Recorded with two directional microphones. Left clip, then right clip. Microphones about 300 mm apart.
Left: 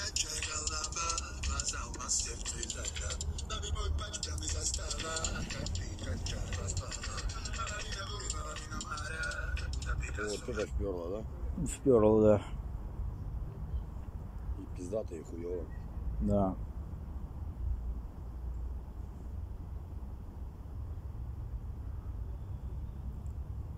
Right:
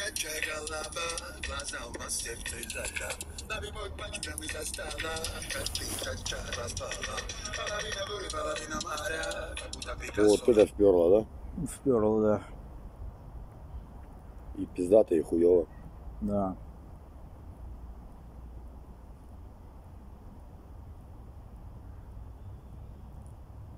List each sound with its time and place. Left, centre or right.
0.0 s speech: right
11.6 s speech: centre
14.8 s speech: right
16.3 s speech: centre